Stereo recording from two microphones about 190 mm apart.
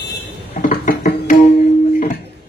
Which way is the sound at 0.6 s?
45° left (ahead or behind).